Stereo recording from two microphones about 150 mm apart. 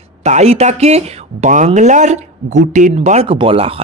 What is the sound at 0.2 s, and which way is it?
Speech, 45° right (ahead or behind).